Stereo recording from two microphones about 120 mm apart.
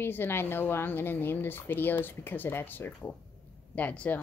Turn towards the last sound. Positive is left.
turn(degrees=10)  # may be behind; listen again after turning